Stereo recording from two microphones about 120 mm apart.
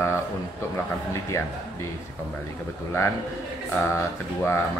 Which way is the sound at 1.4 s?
20° left (ahead or behind).